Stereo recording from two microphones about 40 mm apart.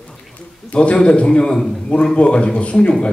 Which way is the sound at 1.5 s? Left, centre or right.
Centre.